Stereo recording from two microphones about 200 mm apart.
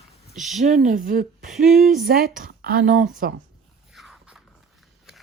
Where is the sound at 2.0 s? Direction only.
45° right (ahead or behind).